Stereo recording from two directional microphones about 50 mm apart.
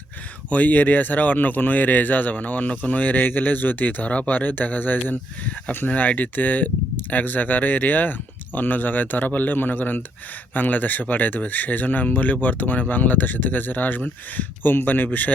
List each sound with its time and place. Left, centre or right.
0.5 s speech: left